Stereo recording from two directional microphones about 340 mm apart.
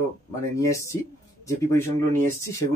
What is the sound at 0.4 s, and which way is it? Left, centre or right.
Speech, centre.